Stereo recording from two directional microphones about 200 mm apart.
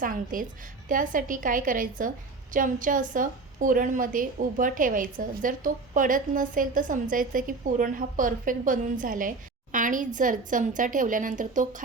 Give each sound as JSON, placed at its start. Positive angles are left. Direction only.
{"t": 0.0, "sound": "a woman's voice", "side_deg": -45}